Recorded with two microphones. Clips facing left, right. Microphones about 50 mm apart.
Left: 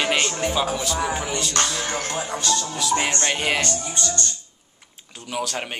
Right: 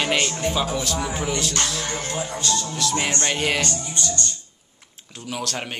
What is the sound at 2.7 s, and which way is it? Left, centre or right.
A man's voice, centre.